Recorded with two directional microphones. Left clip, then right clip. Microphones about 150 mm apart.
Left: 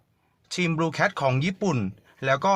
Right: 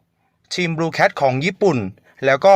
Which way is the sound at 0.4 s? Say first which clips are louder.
Right 5 dB; 30° right (ahead or behind).